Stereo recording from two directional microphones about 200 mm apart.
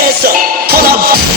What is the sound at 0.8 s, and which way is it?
Music, 50° right (ahead or behind).